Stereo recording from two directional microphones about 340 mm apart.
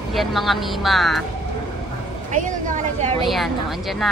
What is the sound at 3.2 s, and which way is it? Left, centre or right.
Speech, centre.